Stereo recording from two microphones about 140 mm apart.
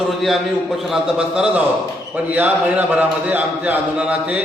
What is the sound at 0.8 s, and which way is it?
A man's voice, centre (ahead or behind).